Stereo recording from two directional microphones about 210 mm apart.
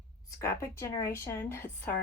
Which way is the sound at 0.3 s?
15° left (ahead or behind).